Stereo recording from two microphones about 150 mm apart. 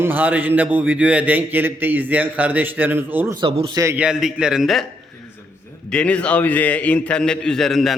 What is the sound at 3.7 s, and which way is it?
Speech, 20° right (ahead or behind).